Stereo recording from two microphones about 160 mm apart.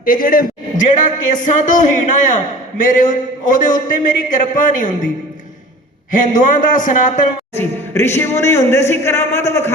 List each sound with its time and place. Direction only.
0.0 s a man's voice: 60° left (ahead or behind)
6.1 s a man's voice: 55° left (ahead or behind)
7.5 s a man's voice: 15° left (ahead or behind)